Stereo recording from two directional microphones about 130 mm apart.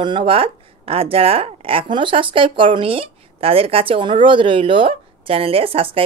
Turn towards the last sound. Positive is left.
turn(degrees=-45)  # may be behind; listen again after turning